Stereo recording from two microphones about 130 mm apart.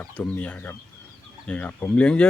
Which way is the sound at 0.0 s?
10° left (ahead or behind).